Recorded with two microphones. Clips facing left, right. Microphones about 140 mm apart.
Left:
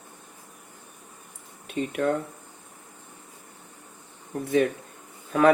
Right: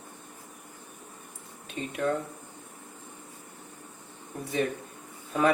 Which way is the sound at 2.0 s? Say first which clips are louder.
Left 3 dB; 45° left (ahead or behind).